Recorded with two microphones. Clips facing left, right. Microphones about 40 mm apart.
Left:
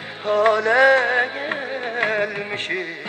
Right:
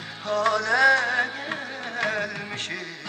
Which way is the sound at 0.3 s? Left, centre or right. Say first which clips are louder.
Left 6 dB; left.